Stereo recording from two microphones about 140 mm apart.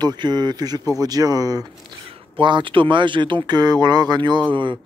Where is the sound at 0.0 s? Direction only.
30° right (ahead or behind).